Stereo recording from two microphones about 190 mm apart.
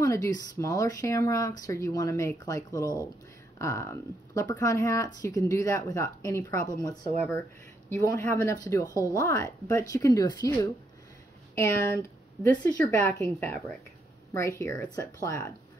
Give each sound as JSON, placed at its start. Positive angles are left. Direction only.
{"t": 0.0, "sound": "speech", "side_deg": 15}
{"t": 7.2, "sound": "speech", "side_deg": 5}
{"t": 14.6, "sound": "speech", "side_deg": 15}